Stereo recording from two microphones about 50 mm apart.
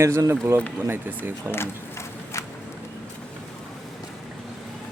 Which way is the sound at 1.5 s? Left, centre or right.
Left.